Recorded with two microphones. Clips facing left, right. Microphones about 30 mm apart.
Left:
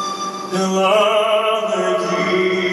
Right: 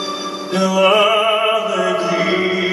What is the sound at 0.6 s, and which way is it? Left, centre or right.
Music, centre.